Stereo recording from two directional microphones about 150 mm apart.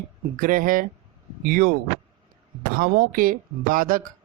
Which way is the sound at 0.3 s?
65° right (ahead or behind).